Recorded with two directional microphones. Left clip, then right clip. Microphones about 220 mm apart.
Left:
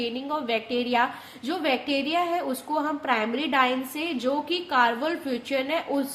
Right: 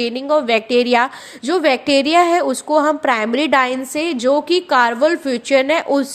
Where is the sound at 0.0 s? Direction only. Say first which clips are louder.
Right 12 dB; 40° right (ahead or behind).